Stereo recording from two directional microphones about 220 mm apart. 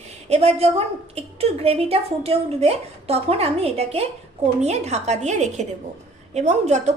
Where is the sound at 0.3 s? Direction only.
30° right (ahead or behind).